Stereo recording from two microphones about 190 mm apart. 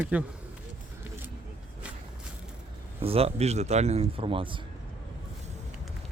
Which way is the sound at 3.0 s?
30° right (ahead or behind).